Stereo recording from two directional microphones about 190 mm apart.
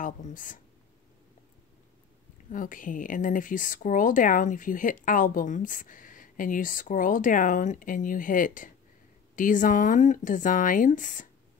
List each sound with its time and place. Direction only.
0.0 s speech: 45° left (ahead or behind)
2.5 s speech: 45° left (ahead or behind)